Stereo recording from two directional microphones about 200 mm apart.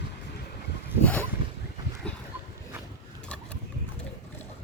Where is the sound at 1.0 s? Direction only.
5° left (ahead or behind).